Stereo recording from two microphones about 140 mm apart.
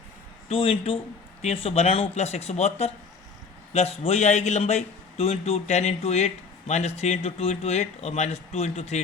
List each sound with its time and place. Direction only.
0.4 s a man's voice: 40° left (ahead or behind)